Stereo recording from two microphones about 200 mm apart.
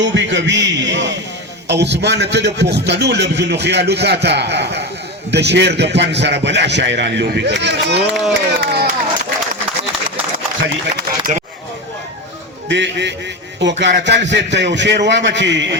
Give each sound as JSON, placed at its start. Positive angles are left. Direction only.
{"t": 0.0, "sound": "a man's voice", "side_deg": -60}
{"t": 8.3, "sound": "a sound", "side_deg": -55}
{"t": 11.3, "sound": "speech", "side_deg": -40}
{"t": 12.6, "sound": "a man's voice", "side_deg": -60}